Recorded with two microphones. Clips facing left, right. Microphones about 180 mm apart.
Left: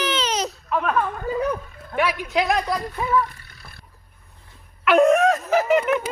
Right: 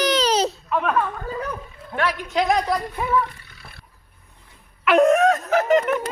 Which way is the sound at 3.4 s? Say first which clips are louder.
Right 1 dB; 40° left (ahead or behind).